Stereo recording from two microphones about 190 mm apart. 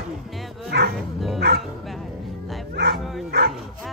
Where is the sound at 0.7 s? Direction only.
60° right (ahead or behind).